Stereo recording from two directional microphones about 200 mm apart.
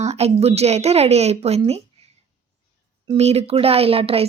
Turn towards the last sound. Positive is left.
turn(degrees=-30)  # may be behind; listen again after turning